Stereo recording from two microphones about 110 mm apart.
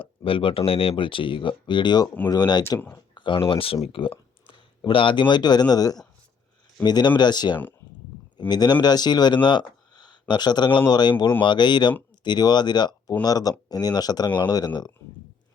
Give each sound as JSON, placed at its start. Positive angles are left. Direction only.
{"t": 0.0, "sound": "speech", "side_deg": 55}
{"t": 3.2, "sound": "speech", "side_deg": 50}